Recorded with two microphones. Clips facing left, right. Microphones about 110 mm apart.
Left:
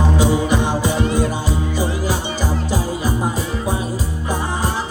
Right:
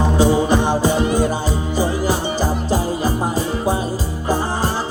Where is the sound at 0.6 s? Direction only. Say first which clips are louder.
Right 2 dB; 20° right (ahead or behind); by 3.1 s 40° right (ahead or behind).